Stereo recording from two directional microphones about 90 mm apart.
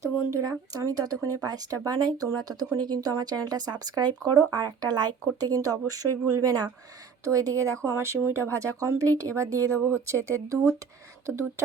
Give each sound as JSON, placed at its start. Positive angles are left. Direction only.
{"t": 0.3, "sound": "speech", "side_deg": -40}